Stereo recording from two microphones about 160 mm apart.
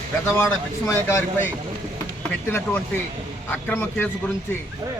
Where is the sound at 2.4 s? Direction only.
15° left (ahead or behind).